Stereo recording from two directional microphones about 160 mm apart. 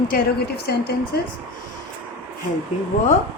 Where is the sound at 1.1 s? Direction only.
75° left (ahead or behind).